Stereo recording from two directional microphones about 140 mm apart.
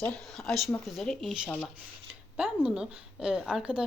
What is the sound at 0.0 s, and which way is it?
A woman's voice, 5° left (ahead or behind).